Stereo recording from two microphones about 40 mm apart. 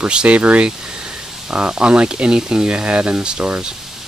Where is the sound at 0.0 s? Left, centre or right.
Right.